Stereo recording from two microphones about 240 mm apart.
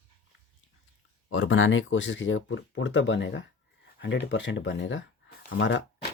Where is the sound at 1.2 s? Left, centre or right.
Left.